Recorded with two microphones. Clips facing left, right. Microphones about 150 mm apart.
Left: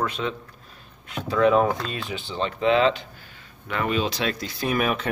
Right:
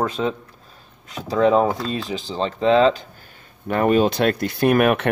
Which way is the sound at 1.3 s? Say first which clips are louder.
Right 2 dB; 30° right (ahead or behind).